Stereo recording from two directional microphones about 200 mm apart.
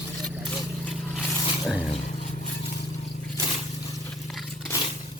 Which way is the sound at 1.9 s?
30° left (ahead or behind).